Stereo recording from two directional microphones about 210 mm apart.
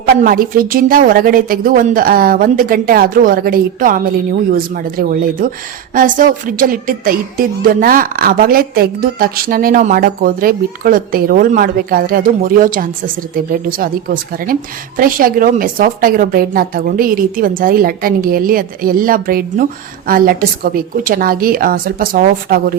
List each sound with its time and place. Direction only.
0.2 s speech: 45° right (ahead or behind)